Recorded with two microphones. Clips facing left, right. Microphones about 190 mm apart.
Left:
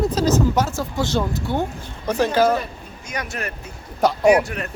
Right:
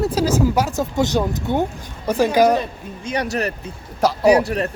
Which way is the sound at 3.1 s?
35° right (ahead or behind).